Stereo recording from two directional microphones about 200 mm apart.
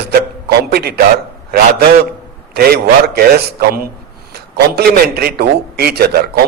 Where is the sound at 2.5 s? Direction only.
50° right (ahead or behind).